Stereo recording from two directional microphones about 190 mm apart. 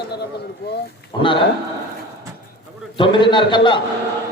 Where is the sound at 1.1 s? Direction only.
25° left (ahead or behind).